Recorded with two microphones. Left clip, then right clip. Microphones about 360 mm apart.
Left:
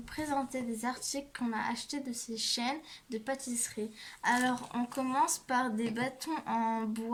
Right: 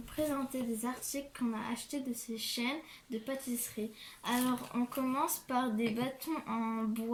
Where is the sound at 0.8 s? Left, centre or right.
Left.